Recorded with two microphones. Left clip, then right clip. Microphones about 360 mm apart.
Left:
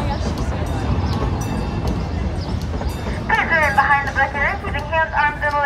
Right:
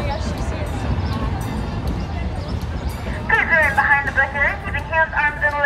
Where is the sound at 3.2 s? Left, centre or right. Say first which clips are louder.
Right 1 dB; centre.